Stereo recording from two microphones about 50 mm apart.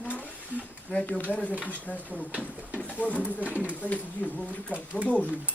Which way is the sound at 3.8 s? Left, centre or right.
Left.